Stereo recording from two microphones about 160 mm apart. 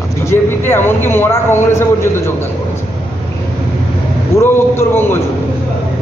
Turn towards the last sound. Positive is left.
turn(degrees=15)  # may be behind; listen again after turning